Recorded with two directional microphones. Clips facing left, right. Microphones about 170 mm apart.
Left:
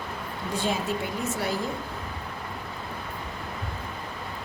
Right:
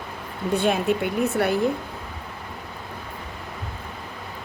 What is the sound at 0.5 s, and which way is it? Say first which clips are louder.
Speech: right 7 dB; 60° right (ahead or behind).